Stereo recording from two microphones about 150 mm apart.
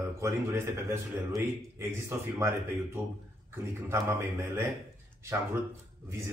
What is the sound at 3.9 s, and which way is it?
Speech, 20° right (ahead or behind).